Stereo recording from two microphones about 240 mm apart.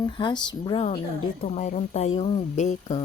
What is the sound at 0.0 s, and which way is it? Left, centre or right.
Speech, centre.